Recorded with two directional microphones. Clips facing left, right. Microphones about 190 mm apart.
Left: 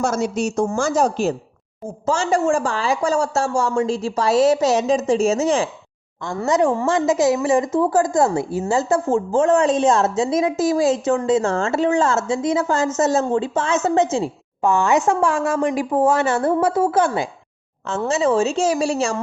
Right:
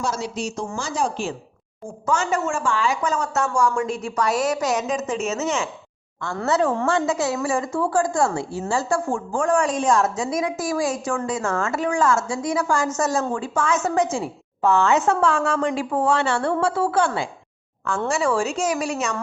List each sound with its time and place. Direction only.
0.0 s speech: 50° left (ahead or behind)
2.0 s a woman's voice: 30° left (ahead or behind)
6.4 s a woman's voice: 15° left (ahead or behind)
14.6 s a woman's voice: 15° left (ahead or behind); by 19.1 s 30° left (ahead or behind)